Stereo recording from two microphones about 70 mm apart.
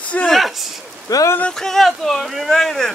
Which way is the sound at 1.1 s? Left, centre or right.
Left.